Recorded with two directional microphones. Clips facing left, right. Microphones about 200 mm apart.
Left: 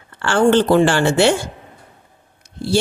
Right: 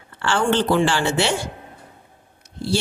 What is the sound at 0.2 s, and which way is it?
Speech, 50° left (ahead or behind).